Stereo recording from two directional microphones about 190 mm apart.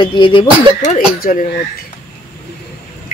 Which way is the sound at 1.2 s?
50° left (ahead or behind).